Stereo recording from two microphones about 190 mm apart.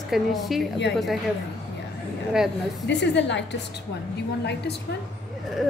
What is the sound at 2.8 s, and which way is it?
A woman's voice, 65° left (ahead or behind).